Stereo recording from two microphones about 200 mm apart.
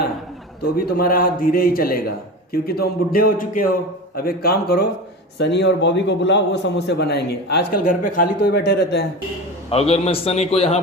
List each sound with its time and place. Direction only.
0.6 s a man's voice: 50° left (ahead or behind)
7.9 s a man's voice: 45° left (ahead or behind)
9.6 s a man's voice: 30° left (ahead or behind)